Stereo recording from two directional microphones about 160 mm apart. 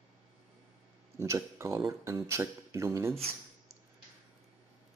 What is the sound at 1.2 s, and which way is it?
Speech, 20° right (ahead or behind).